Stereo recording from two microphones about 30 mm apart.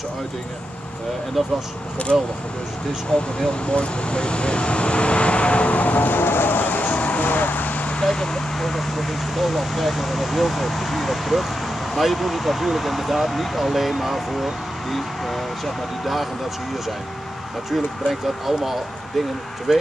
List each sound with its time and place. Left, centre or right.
2.1 s speech: centre
3.1 s speech: left
7.1 s vehicle: left
8.0 s speech: left
8.5 s speech: centre
17.7 s speech: centre